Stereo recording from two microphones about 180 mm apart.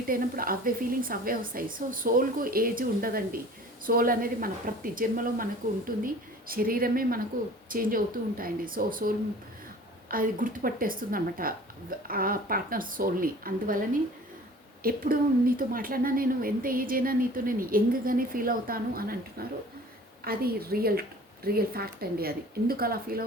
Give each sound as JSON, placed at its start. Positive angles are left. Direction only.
{"t": 0.1, "sound": "speech", "side_deg": -55}
{"t": 6.5, "sound": "speech", "side_deg": -55}
{"t": 14.8, "sound": "speech", "side_deg": -55}